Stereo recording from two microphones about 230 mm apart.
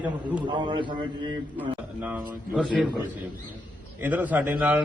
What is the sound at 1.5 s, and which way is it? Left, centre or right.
A man's voice, centre.